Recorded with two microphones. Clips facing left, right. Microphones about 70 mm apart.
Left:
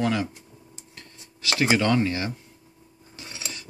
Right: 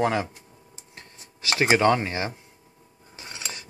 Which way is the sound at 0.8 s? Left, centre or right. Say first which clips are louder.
Right 3 dB; right.